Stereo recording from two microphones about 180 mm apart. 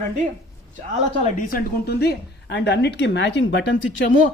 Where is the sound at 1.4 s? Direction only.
55° left (ahead or behind); by 4.0 s 85° left.